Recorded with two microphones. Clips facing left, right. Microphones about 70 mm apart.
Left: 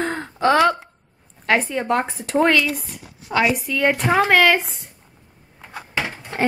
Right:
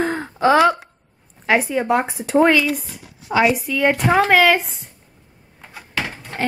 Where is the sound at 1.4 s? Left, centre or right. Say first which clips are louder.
Right 2 dB; centre.